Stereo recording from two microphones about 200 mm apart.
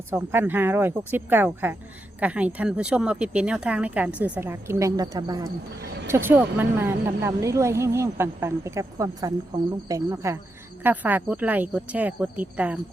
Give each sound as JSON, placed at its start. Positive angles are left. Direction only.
{"t": 0.1, "sound": "speech", "side_deg": -10}